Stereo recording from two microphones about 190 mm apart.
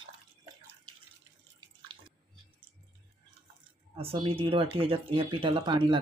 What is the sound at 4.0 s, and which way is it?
Speech, 30° right (ahead or behind).